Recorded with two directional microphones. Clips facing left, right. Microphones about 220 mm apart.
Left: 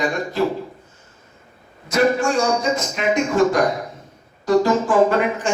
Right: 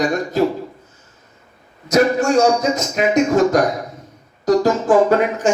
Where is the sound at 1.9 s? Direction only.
40° right (ahead or behind).